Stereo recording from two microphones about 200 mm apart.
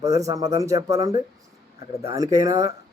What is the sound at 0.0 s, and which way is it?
A man's voice, 15° right (ahead or behind).